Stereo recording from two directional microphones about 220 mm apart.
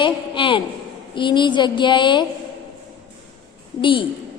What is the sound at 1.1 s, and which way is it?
A woman's voice, 20° left (ahead or behind).